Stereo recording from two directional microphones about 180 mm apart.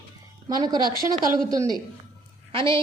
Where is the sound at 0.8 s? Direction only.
25° left (ahead or behind).